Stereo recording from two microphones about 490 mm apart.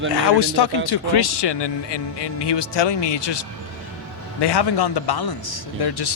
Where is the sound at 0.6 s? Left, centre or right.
Left.